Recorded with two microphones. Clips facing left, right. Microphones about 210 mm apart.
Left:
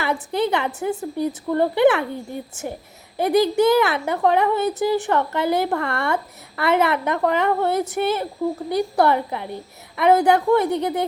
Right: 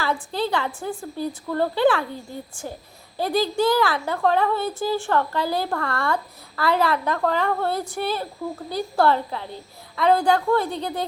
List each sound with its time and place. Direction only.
0.0 s a woman's voice: 20° left (ahead or behind)